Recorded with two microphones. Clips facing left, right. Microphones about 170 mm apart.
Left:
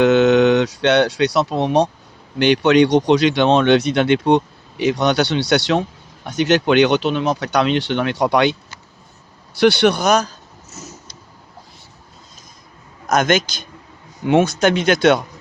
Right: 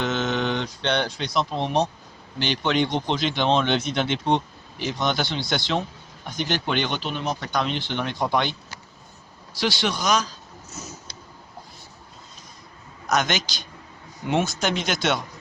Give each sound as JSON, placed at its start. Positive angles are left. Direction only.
{"t": 0.0, "sound": "a sound", "side_deg": 65}
{"t": 2.4, "sound": "speech", "side_deg": 70}
{"t": 9.6, "sound": "speech", "side_deg": 65}
{"t": 13.1, "sound": "a man's voice", "side_deg": 50}